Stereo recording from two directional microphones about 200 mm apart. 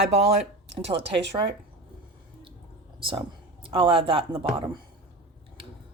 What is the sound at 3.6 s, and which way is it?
Speech, 25° right (ahead or behind).